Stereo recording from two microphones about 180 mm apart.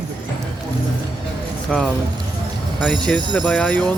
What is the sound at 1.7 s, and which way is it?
Speech, 5° left (ahead or behind).